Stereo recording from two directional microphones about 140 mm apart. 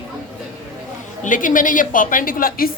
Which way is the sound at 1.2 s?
70° left (ahead or behind).